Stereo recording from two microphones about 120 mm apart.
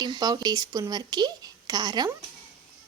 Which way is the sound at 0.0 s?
35° right (ahead or behind).